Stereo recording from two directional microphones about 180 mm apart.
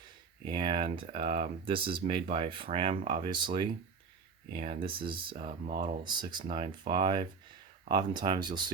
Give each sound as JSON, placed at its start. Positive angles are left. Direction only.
{"t": 0.4, "sound": "speech", "side_deg": -25}